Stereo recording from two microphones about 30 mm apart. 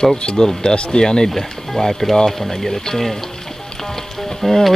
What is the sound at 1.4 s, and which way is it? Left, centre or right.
Speech, centre.